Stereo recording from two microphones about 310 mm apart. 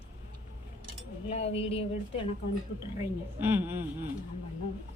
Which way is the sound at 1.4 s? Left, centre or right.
Centre.